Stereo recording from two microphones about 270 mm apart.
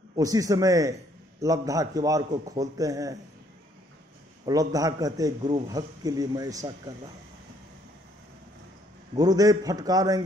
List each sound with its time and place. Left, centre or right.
0.1 s a man's voice: centre
4.5 s a man's voice: centre
9.1 s a man's voice: centre